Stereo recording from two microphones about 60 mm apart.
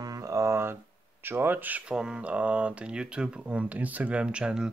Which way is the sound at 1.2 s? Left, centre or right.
Right.